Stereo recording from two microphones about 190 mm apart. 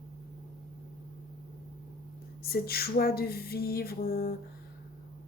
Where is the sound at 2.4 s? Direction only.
55° left (ahead or behind).